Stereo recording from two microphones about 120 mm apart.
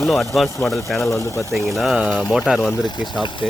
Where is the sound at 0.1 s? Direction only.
Centre (ahead or behind).